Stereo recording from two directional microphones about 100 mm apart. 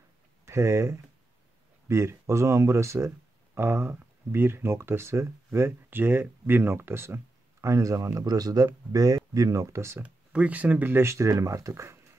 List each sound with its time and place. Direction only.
0.5 s speech: 30° right (ahead or behind)
10.0 s speech: 15° right (ahead or behind); by 12.0 s 30° right (ahead or behind)